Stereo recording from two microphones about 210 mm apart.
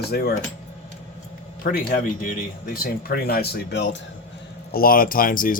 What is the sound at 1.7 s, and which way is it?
Speech, 40° left (ahead or behind).